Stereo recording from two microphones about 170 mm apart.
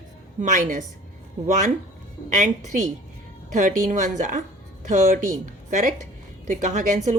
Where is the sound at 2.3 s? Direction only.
50° right (ahead or behind).